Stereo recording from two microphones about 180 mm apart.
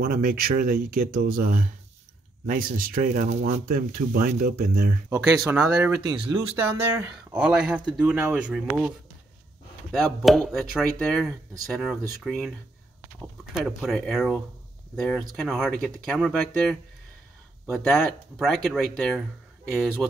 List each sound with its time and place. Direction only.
0.0 s speech: 55° right (ahead or behind); by 3.5 s 40° right (ahead or behind)
3.6 s speech: 55° right (ahead or behind)
5.4 s speech: 5° right (ahead or behind)
6.0 s speech: 25° right (ahead or behind)
6.4 s speech: 10° right (ahead or behind)